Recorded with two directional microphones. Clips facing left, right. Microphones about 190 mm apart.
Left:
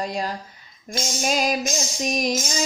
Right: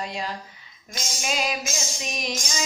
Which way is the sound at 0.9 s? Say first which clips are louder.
Left 6 dB; 40° left (ahead or behind).